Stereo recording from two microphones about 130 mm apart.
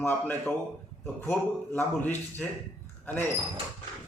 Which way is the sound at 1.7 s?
15° left (ahead or behind).